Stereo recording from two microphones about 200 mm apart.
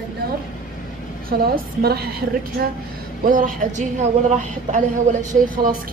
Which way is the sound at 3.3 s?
40° right (ahead or behind).